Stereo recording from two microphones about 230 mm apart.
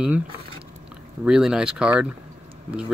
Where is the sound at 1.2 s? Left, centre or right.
Centre.